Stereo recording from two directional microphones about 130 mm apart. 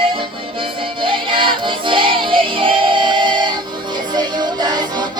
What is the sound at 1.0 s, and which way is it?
Music, 40° right (ahead or behind).